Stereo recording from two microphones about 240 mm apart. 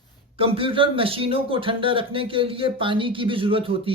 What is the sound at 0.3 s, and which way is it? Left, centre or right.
Speech, right.